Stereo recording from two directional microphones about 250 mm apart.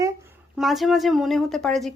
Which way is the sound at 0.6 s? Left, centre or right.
Centre.